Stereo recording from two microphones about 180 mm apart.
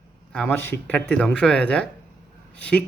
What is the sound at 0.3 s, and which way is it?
Speech, 10° left (ahead or behind).